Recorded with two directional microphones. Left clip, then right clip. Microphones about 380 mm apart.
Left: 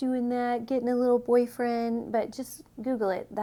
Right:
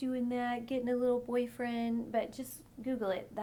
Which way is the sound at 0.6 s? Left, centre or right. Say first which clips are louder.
Left 6 dB; left.